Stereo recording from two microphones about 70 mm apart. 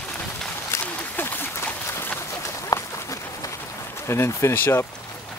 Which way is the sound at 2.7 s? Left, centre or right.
Left.